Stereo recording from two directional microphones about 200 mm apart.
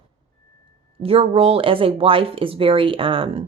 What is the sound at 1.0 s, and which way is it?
Speech, 30° right (ahead or behind).